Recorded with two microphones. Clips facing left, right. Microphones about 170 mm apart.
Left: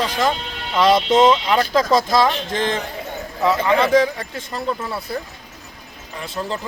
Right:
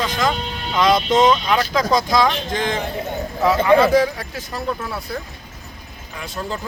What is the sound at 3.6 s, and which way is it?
Speech, 5° right (ahead or behind).